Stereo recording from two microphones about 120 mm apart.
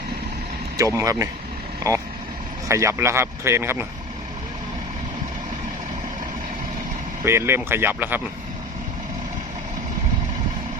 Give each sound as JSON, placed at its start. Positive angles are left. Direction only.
{"t": 0.8, "sound": "speech", "side_deg": -25}
{"t": 7.3, "sound": "speech", "side_deg": -20}